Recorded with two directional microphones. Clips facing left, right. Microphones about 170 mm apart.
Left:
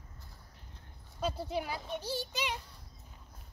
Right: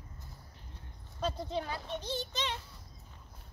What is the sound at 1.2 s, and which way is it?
A child's voice, 5° left (ahead or behind).